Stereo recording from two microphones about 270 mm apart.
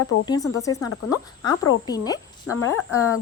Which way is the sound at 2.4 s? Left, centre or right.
Left.